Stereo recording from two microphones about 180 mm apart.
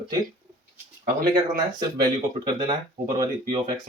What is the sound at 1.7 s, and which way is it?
Speech, 25° right (ahead or behind).